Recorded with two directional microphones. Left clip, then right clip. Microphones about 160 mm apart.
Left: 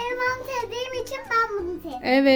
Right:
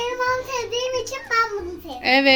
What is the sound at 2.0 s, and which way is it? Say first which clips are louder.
Speech: right 3 dB; 40° left (ahead or behind).